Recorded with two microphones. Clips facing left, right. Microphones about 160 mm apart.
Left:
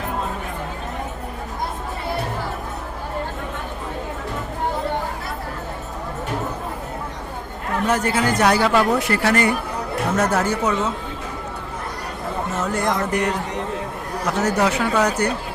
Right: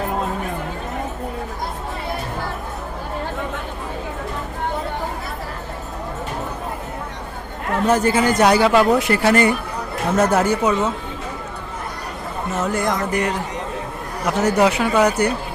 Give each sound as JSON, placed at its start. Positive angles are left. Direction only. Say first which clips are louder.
{"t": 8.0, "sound": "speech", "louder": "right 2 dB", "side_deg": -20}
{"t": 12.7, "sound": "speech", "louder": "left 1 dB", "side_deg": -5}